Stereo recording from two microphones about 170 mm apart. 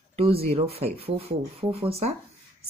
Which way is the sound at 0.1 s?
35° right (ahead or behind).